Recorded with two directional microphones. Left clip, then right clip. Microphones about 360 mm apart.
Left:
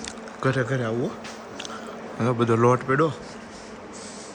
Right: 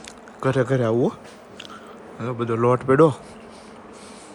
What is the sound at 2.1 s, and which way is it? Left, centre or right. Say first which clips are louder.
A man's voice: left 3 dB; centre.